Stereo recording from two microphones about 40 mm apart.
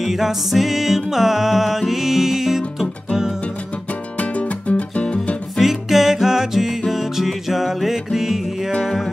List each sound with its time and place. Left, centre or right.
0.0 s music: centre
4.2 s music: left
5.6 s music: centre